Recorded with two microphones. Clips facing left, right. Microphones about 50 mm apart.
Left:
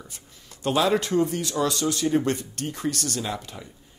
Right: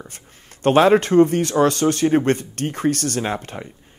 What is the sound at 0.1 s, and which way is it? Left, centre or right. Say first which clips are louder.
Speech: right 3 dB; right.